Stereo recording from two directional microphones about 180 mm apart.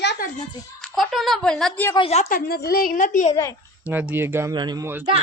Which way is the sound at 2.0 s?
35° left (ahead or behind).